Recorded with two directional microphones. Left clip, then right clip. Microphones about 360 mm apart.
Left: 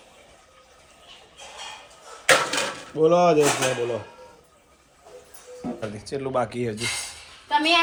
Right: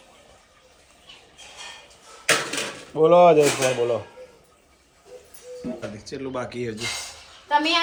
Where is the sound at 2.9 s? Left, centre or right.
Right.